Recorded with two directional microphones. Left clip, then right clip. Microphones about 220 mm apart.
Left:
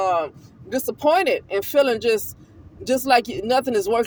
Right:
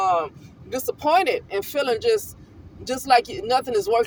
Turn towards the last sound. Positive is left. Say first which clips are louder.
# left 1 dB
turn(degrees=30)  # may be behind; listen again after turning